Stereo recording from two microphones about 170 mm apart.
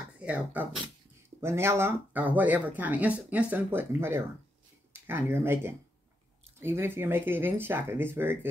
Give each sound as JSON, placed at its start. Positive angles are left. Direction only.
{"t": 0.2, "sound": "speech", "side_deg": -10}